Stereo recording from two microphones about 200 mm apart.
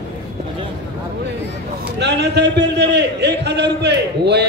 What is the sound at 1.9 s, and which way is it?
A man's voice, 60° right (ahead or behind).